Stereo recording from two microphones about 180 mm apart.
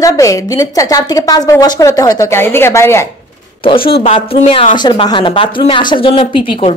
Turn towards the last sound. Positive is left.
turn(degrees=30)  # may be behind; listen again after turning